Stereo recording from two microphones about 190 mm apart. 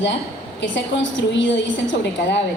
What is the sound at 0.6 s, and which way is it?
A woman's voice, 70° left (ahead or behind).